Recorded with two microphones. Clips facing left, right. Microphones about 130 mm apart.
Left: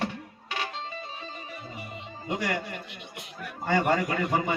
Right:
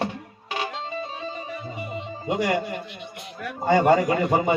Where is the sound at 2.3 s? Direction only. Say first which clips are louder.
Right 6 dB; 20° right (ahead or behind).